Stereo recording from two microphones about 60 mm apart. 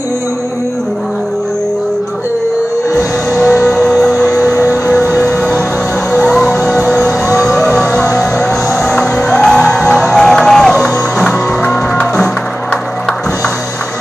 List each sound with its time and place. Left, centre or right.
2.9 s music: left
3.6 s music: centre
6.2 s music: centre
7.3 s fire engine: centre
8.9 s music: centre